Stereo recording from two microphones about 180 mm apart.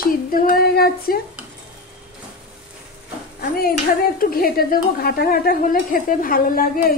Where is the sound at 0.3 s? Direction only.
55° left (ahead or behind).